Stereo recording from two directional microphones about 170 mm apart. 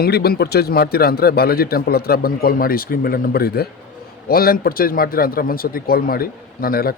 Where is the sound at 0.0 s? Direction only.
65° left (ahead or behind).